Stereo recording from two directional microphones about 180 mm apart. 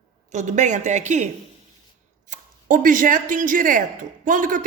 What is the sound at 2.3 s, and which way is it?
A man's voice, 50° right (ahead or behind).